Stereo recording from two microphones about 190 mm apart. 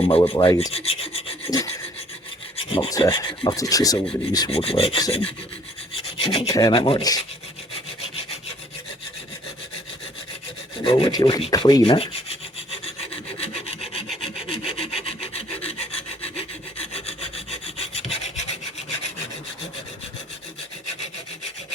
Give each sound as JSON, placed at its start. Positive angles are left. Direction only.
{"t": 0.0, "sound": "speech", "side_deg": 30}
{"t": 0.7, "sound": "rub", "side_deg": 30}
{"t": 1.5, "sound": "speech", "side_deg": 20}
{"t": 2.6, "sound": "filing", "side_deg": 30}
{"t": 3.0, "sound": "speech", "side_deg": 25}
{"t": 4.5, "sound": "speech", "side_deg": 30}
{"t": 5.9, "sound": "filing", "side_deg": 30}
{"t": 6.5, "sound": "speech", "side_deg": 20}
{"t": 6.7, "sound": "speech", "side_deg": 30}
{"t": 10.8, "sound": "speech", "side_deg": 30}
{"t": 14.5, "sound": "rub", "side_deg": 30}